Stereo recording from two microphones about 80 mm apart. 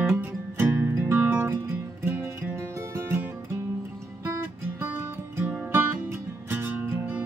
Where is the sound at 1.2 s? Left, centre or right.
Centre; by 3.1 s right.